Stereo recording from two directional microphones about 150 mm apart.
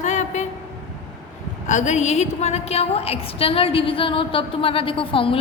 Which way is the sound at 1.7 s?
55° left (ahead or behind).